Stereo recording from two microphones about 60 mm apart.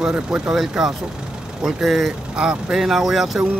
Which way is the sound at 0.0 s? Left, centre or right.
Centre.